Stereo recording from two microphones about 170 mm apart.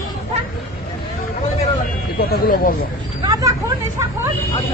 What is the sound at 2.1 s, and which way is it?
Speech, 60° left (ahead or behind).